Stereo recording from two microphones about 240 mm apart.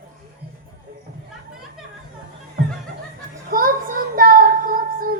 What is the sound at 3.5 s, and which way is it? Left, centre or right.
Child singing, right.